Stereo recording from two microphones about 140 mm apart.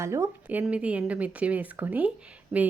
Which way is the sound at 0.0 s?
20° right (ahead or behind).